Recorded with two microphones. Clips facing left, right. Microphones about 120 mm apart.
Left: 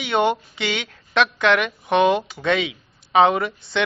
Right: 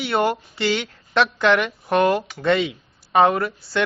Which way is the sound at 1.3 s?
10° right (ahead or behind).